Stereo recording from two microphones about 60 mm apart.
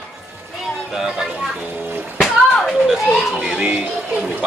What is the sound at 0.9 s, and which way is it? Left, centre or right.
Speech, centre.